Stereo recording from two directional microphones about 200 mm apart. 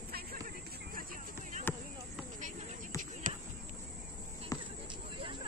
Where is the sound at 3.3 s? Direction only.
40° right (ahead or behind).